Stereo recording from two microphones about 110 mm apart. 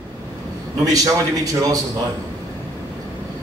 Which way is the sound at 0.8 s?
35° right (ahead or behind).